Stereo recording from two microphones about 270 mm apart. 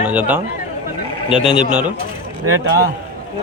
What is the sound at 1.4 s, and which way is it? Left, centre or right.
Speech, centre.